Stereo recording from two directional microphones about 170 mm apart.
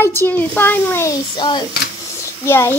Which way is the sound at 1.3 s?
25° left (ahead or behind).